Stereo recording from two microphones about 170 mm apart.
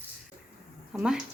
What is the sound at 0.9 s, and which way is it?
Speech, 5° right (ahead or behind).